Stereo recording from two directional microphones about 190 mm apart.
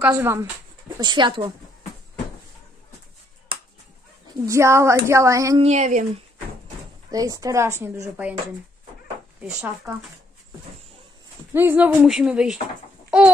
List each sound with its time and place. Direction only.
0.0 s a woman's voice: 10° right (ahead or behind)
0.9 s speech: 25° right (ahead or behind)
4.5 s a woman's voice: 15° right (ahead or behind)
5.6 s speech: 35° right (ahead or behind)
7.1 s a woman's voice: 20° right (ahead or behind)
9.4 s a woman's voice: 10° right (ahead or behind)
11.5 s speech: 10° right (ahead or behind)